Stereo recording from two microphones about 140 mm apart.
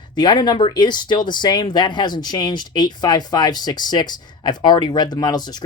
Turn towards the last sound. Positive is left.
turn(degrees=30)  # may be behind; listen again after turning